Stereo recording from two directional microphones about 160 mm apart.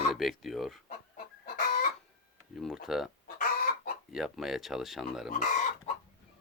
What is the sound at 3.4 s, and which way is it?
Chicken, 65° left (ahead or behind).